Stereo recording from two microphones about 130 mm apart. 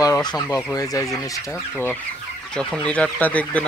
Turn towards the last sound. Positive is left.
turn(degrees=10)  # may be behind; listen again after turning